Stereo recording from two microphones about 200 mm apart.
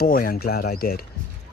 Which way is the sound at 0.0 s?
45° left (ahead or behind).